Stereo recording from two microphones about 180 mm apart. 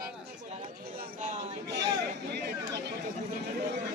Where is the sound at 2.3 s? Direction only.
70° right (ahead or behind).